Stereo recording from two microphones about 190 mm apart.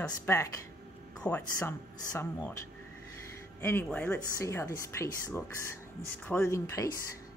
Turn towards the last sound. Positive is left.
turn(degrees=15)  # may be behind; listen again after turning